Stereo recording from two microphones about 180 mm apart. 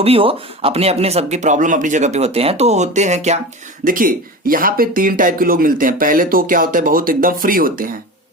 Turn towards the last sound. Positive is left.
turn(degrees=-50)  # may be behind; listen again after turning